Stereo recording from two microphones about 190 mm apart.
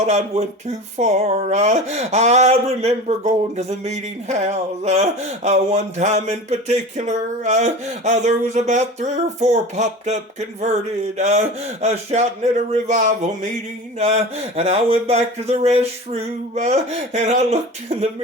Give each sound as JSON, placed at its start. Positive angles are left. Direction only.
{"t": 0.0, "sound": "speech", "side_deg": -35}
{"t": 11.2, "sound": "speech", "side_deg": -35}